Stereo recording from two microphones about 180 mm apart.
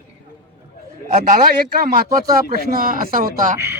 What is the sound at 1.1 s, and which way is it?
A man's voice, 50° right (ahead or behind).